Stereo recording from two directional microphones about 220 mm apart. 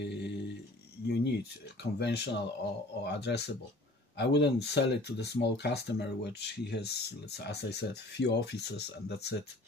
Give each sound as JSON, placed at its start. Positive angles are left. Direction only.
{"t": 0.0, "sound": "music", "side_deg": 50}
{"t": 1.0, "sound": "a sound", "side_deg": 50}
{"t": 1.8, "sound": "speech", "side_deg": 50}